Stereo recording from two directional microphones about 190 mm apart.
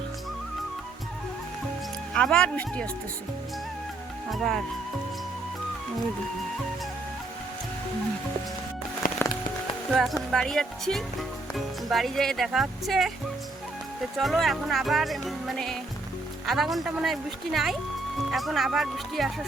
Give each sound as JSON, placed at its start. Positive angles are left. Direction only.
{"t": 2.1, "sound": "speech", "side_deg": 5}
{"t": 4.3, "sound": "speech", "side_deg": 0}
{"t": 9.0, "sound": "music", "side_deg": 45}
{"t": 9.9, "sound": "speech", "side_deg": 0}
{"t": 14.2, "sound": "speech", "side_deg": 0}